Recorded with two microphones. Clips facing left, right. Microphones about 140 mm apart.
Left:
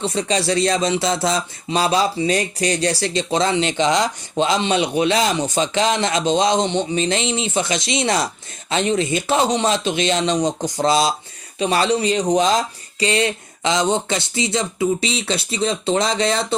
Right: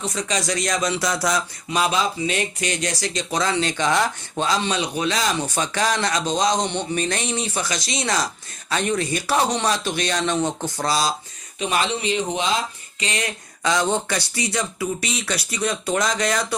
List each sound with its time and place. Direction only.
0.0 s speech: 30° left (ahead or behind)
11.6 s speech: 35° left (ahead or behind)